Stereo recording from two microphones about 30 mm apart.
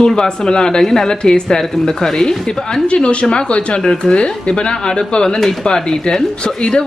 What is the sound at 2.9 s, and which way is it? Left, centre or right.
Speech, left.